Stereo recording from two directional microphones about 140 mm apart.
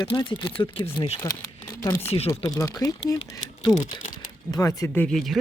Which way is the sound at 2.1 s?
45° left (ahead or behind).